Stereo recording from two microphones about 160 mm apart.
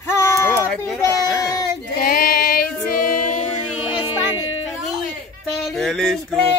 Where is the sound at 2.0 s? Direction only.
65° left (ahead or behind).